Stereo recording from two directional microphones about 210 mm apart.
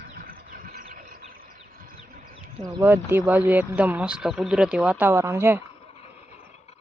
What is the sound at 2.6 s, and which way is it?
Speech, 10° right (ahead or behind).